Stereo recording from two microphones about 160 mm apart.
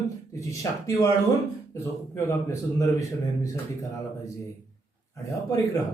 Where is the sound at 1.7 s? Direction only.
15° left (ahead or behind).